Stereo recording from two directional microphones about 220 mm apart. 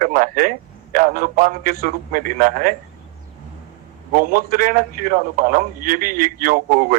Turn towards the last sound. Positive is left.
turn(degrees=-40)  # may be behind; listen again after turning